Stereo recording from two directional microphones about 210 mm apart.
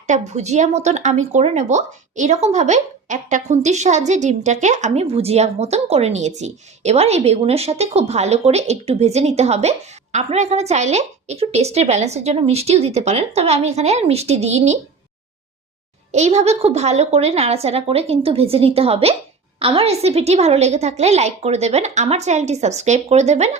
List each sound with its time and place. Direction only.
0.1 s a woman's voice: 30° right (ahead or behind)
16.1 s a woman's voice: 30° right (ahead or behind)